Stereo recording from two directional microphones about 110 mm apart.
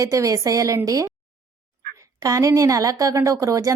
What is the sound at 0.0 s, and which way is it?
A woman's voice, 30° right (ahead or behind).